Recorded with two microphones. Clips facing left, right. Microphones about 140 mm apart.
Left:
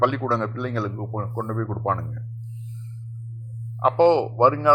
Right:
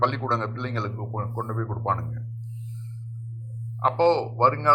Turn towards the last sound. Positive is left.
turn(degrees=10)  # may be behind; listen again after turning